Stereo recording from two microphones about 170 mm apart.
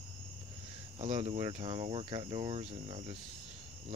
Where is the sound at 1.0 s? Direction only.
35° right (ahead or behind).